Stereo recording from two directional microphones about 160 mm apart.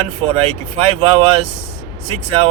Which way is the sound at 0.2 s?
35° right (ahead or behind).